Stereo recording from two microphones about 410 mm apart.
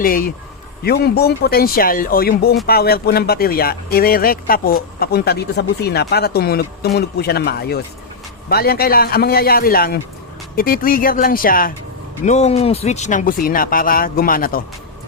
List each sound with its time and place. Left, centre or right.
0.0 s speech: left